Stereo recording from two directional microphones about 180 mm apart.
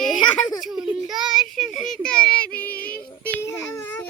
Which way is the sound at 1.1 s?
Centre (ahead or behind).